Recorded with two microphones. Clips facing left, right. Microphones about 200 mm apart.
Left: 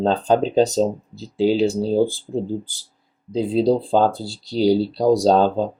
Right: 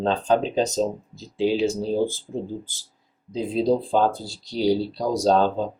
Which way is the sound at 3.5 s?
30° left (ahead or behind).